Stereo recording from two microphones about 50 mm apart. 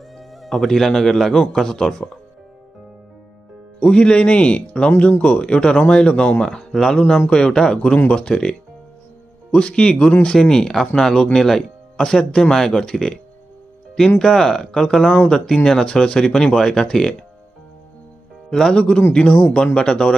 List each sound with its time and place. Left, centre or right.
0.4 s speech: centre
3.8 s a man's voice: centre
18.5 s speech: centre